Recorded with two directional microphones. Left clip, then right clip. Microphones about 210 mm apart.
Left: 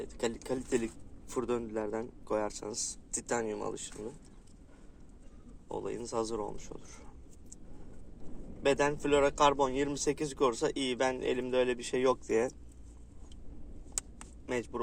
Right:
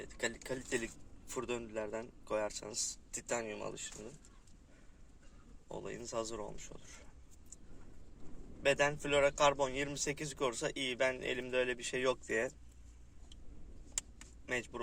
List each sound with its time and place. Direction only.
0.0 s a man's voice: 15° right (ahead or behind)
5.6 s speech: 20° right (ahead or behind)
8.6 s a man's voice: 20° right (ahead or behind)
14.4 s speech: 20° right (ahead or behind)